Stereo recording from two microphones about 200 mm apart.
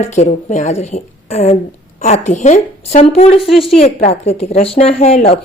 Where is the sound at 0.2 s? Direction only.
35° left (ahead or behind).